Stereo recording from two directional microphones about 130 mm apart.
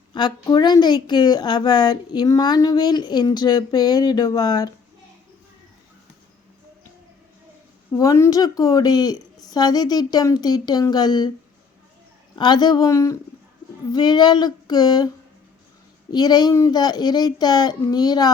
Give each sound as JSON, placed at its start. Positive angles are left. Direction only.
{"t": 0.1, "sound": "a woman's voice", "side_deg": 35}
{"t": 7.9, "sound": "a woman's voice", "side_deg": 25}
{"t": 12.4, "sound": "a woman's voice", "side_deg": 35}
{"t": 16.1, "sound": "a woman's voice", "side_deg": 35}